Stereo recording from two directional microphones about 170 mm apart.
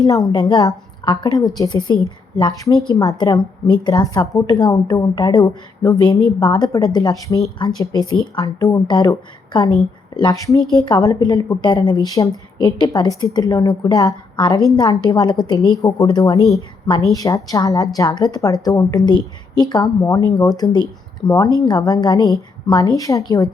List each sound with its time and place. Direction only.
0.3 s a woman's voice: 25° left (ahead or behind)